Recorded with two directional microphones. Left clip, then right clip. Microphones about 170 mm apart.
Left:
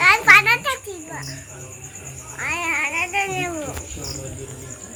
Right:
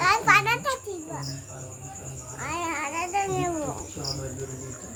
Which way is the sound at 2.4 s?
15° right (ahead or behind).